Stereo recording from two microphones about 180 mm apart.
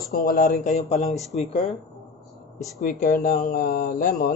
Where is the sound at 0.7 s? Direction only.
35° left (ahead or behind).